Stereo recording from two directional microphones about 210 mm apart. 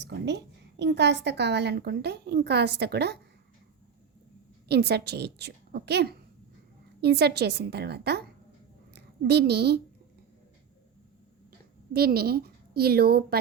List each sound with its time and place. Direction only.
0.0 s a woman's voice: 55° right (ahead or behind)
4.7 s a woman's voice: 50° right (ahead or behind)
11.9 s a woman's voice: 50° right (ahead or behind)